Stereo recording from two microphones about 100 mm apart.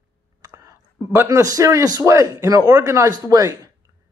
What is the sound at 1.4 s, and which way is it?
A man's voice, 35° right (ahead or behind).